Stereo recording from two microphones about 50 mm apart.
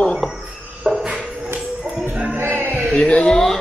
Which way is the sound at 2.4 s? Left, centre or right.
Right.